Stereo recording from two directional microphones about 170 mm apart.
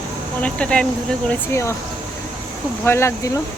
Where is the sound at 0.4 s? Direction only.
5° left (ahead or behind).